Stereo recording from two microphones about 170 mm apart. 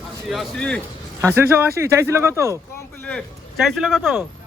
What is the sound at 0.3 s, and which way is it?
Speech, centre (ahead or behind).